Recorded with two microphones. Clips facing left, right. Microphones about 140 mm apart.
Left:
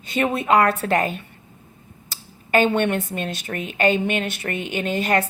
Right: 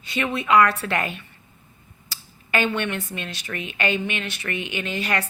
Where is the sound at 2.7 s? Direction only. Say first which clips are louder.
Left 6 dB; 50° left (ahead or behind).